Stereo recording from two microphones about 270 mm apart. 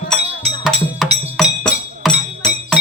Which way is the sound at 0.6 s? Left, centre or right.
Centre.